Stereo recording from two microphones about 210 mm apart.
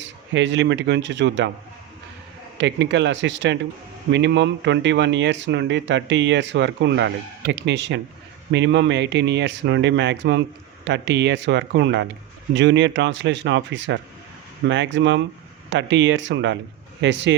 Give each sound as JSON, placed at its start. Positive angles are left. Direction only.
{"t": 0.0, "sound": "speech", "side_deg": -60}
{"t": 2.6, "sound": "speech", "side_deg": -55}